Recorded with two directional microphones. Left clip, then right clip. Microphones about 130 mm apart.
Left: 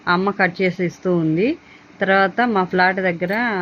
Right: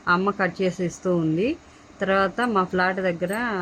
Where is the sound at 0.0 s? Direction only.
15° left (ahead or behind).